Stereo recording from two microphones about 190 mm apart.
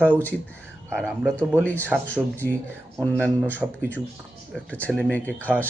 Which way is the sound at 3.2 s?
5° left (ahead or behind).